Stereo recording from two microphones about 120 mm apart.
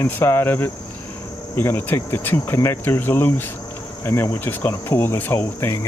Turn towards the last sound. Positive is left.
turn(degrees=20)  # may be behind; listen again after turning